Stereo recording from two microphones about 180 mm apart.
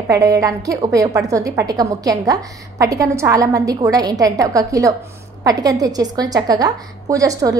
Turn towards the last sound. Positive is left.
turn(degrees=-20)  # may be behind; listen again after turning